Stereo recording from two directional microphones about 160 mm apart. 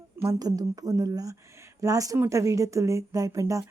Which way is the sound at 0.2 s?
20° right (ahead or behind).